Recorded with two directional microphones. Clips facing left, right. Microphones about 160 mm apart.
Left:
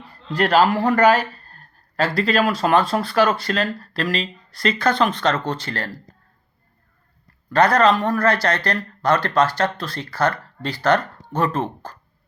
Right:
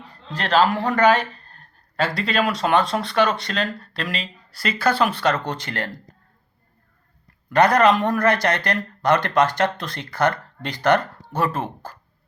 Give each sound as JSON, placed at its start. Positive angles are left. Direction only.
{"t": 0.3, "sound": "speech", "side_deg": 10}
{"t": 7.5, "sound": "speech", "side_deg": -15}